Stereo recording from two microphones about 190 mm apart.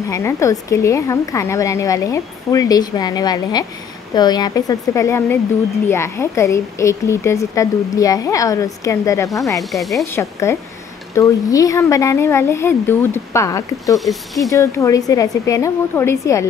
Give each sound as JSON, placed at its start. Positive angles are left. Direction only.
{"t": 0.1, "sound": "a woman's voice", "side_deg": 15}
{"t": 9.6, "sound": "speech", "side_deg": 0}
{"t": 10.1, "sound": "a woman's voice", "side_deg": 15}
{"t": 13.9, "sound": "speech", "side_deg": 0}
{"t": 14.5, "sound": "a woman's voice", "side_deg": 15}